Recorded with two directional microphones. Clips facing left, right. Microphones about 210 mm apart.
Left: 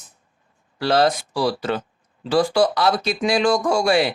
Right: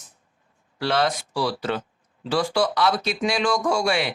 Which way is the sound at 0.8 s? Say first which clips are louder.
Left 5 dB; 35° left (ahead or behind).